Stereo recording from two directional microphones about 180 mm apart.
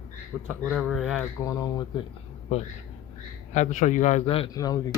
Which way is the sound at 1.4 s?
20° left (ahead or behind).